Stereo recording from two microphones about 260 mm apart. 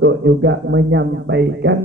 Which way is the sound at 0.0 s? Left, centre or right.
Right.